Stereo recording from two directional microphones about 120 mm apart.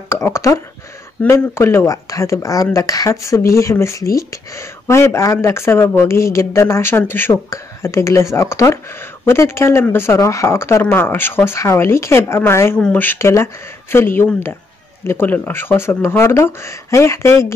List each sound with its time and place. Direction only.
0.1 s speech: 25° left (ahead or behind)